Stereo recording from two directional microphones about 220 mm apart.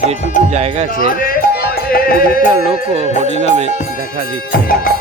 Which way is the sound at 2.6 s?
25° right (ahead or behind).